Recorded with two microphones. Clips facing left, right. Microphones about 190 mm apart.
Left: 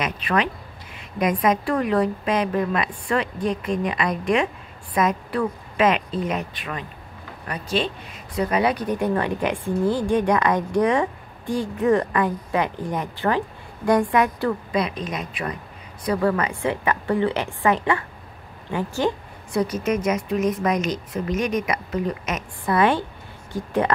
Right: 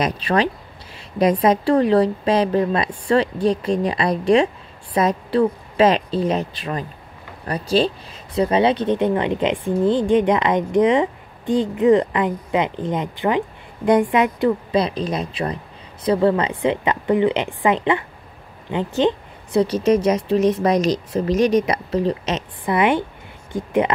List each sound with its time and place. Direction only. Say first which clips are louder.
0.0 s a woman's voice: right 4 dB; 30° right (ahead or behind)
14.7 s a woman's voice: right 5 dB; 30° right (ahead or behind)